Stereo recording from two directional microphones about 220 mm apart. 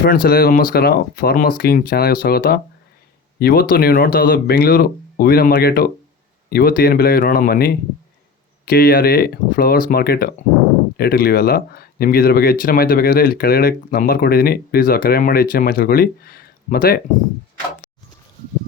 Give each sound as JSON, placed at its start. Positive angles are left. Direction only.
{"t": 0.0, "sound": "speech", "side_deg": 40}